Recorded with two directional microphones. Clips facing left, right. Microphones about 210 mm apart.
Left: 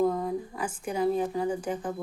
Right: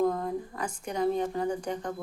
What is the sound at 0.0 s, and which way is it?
A woman's voice, 5° left (ahead or behind).